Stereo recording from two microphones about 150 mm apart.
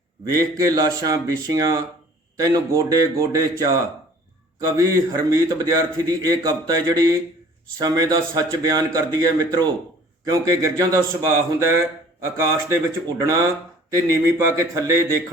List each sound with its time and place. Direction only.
0.3 s a man's voice: 20° right (ahead or behind)